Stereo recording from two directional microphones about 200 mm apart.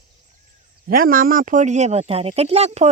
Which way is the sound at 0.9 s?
45° right (ahead or behind).